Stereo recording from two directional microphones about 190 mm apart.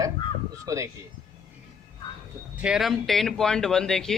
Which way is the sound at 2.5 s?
5° right (ahead or behind).